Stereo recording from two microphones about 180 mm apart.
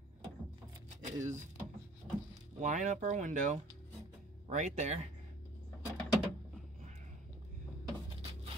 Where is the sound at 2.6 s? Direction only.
40° right (ahead or behind).